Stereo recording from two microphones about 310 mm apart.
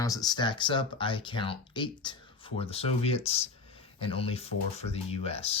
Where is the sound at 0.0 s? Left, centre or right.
Centre.